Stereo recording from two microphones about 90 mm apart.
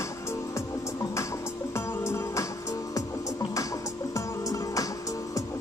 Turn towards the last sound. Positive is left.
turn(degrees=40)  # may be behind; listen again after turning